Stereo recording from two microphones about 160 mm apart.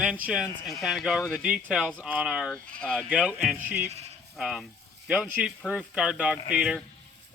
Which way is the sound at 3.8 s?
40° right (ahead or behind).